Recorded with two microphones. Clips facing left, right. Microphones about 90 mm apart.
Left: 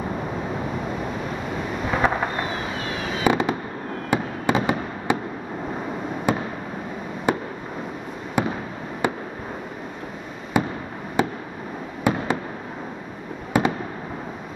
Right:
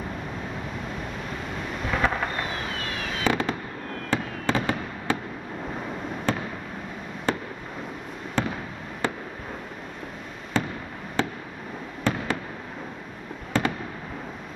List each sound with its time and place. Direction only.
0.5 s thunder: 5° left (ahead or behind)
4.1 s fireworks: 15° left (ahead or behind)
6.3 s fireworks: 15° left (ahead or behind)
10.6 s fireworks: 15° left (ahead or behind)
13.5 s fireworks: 15° left (ahead or behind)